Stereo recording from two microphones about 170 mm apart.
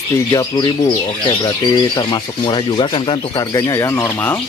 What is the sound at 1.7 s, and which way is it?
Speech, 25° left (ahead or behind).